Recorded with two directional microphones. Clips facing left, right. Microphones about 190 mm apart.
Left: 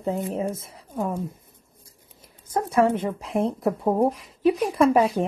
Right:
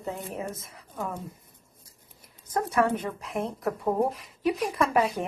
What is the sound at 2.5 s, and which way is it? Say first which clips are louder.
Speech: left 4 dB; 25° left (ahead or behind).